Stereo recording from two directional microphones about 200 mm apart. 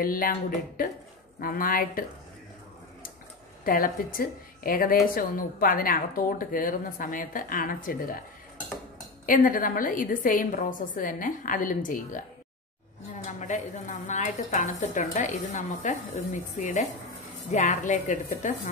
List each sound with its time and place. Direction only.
0.0 s a woman's voice: 45° left (ahead or behind)
3.6 s a woman's voice: 45° left (ahead or behind)
9.2 s a woman's voice: 40° left (ahead or behind)
13.4 s speech: 40° left (ahead or behind)